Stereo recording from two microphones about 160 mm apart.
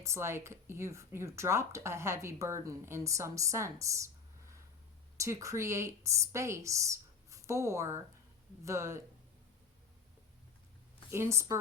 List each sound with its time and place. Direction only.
0.0 s a woman's voice: 15° right (ahead or behind)
11.1 s speech: 15° right (ahead or behind)